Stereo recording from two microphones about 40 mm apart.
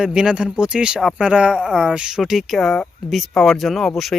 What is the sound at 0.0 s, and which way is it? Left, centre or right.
Speech, centre.